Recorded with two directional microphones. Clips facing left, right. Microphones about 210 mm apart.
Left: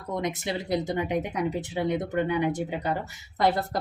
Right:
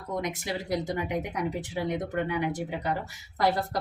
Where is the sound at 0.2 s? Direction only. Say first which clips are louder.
Left 3 dB; 25° left (ahead or behind).